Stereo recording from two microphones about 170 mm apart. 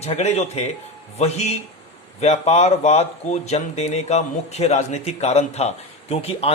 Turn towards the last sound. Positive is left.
turn(degrees=35)  # may be behind; listen again after turning